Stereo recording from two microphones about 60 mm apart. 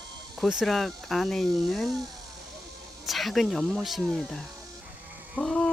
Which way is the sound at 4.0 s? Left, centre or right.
Centre.